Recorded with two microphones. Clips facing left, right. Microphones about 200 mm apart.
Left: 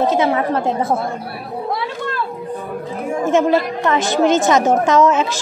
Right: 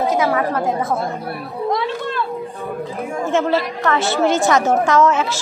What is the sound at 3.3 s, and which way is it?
A woman's voice, 15° left (ahead or behind).